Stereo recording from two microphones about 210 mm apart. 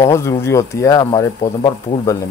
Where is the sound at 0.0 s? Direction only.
15° left (ahead or behind).